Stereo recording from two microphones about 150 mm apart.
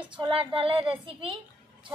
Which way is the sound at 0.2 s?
35° right (ahead or behind).